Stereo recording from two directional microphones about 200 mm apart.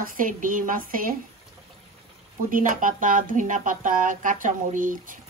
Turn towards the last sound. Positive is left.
turn(degrees=-40)  # may be behind; listen again after turning